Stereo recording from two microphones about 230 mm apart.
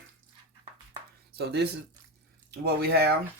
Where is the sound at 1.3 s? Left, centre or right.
Right.